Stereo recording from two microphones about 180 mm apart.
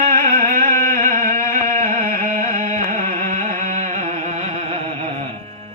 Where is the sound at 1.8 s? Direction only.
50° right (ahead or behind).